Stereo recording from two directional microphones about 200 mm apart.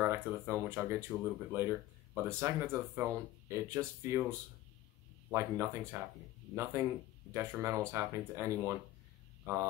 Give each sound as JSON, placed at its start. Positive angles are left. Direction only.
{"t": 0.0, "sound": "speech", "side_deg": -10}
{"t": 5.3, "sound": "speech", "side_deg": -15}